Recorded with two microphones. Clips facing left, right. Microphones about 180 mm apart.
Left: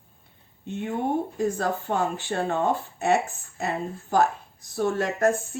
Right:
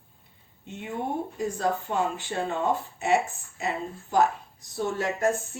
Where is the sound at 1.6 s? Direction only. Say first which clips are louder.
Left 1 dB; 50° left (ahead or behind).